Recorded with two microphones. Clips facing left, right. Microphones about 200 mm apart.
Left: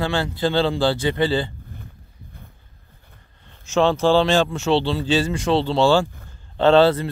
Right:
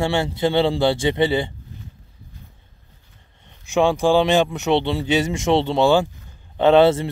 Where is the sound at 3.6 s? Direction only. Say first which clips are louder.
Even; 15° right (ahead or behind).